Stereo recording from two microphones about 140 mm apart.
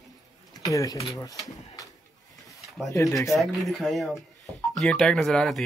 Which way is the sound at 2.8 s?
Centre (ahead or behind).